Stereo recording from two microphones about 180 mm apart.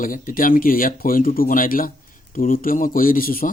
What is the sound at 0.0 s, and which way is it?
Speech, 50° left (ahead or behind).